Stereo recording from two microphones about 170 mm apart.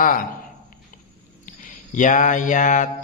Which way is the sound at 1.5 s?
50° left (ahead or behind).